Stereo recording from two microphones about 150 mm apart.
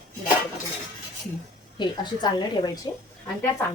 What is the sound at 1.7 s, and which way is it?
Speech, 30° left (ahead or behind).